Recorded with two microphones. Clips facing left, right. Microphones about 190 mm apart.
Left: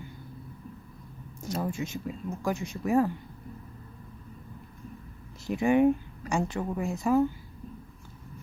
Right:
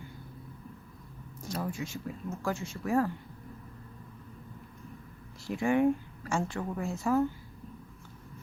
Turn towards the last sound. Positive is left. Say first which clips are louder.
# left 3 dB
turn(degrees=15)  # may be behind; listen again after turning